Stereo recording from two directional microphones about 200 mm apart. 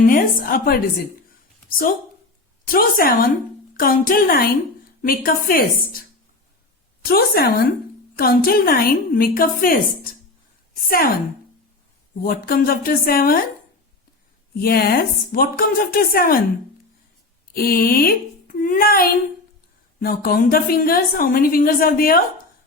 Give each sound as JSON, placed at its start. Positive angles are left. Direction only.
{"t": 0.0, "sound": "a woman's voice", "side_deg": 45}
{"t": 2.6, "sound": "a woman's voice", "side_deg": 45}
{"t": 12.2, "sound": "a woman's voice", "side_deg": 45}
{"t": 14.5, "sound": "a woman's voice", "side_deg": 50}
{"t": 17.5, "sound": "a child's voice", "side_deg": 50}